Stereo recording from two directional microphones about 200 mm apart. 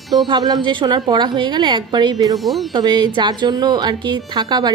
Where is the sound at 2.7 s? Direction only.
20° right (ahead or behind).